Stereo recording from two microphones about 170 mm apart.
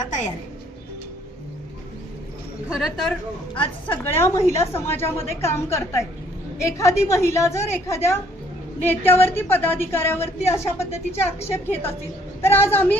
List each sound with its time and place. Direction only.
0.0 s music: 45° left (ahead or behind)
2.7 s speech: centre (ahead or behind)
3.5 s a woman's voice: 30° left (ahead or behind)
4.0 s a woman's voice: 15° left (ahead or behind)